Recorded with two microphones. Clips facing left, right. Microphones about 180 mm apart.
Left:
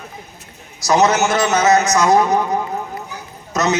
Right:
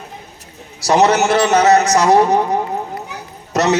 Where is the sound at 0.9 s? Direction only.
35° right (ahead or behind).